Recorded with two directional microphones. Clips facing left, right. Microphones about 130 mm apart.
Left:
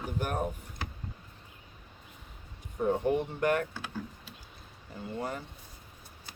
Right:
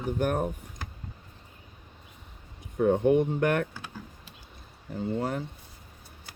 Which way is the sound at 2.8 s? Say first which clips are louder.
Right 6 dB; 65° right (ahead or behind).